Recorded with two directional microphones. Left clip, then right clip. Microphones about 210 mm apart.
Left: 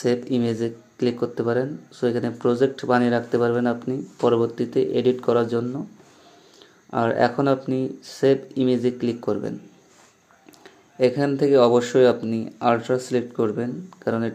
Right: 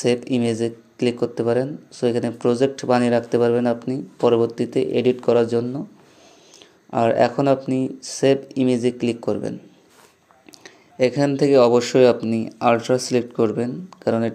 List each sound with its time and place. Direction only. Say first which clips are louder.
0.0 s speech: right 2 dB; 20° right (ahead or behind)
6.9 s speech: right 3 dB; 15° right (ahead or behind)
10.6 s speech: right 1 dB; 20° right (ahead or behind)